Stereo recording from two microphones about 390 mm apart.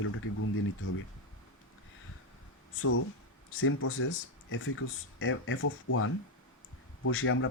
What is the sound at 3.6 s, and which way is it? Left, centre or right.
Speech, left.